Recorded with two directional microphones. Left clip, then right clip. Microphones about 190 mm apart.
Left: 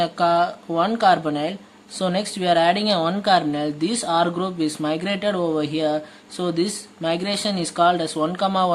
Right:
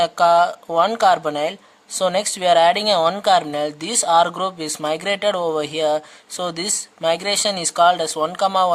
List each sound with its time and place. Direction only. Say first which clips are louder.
0.0 s speech: right 4 dB; 45° right (ahead or behind)